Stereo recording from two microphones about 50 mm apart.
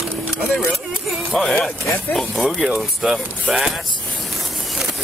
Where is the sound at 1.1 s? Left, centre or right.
Centre.